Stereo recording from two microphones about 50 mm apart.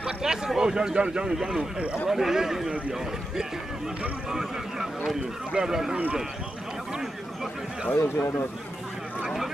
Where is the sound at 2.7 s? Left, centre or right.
Right.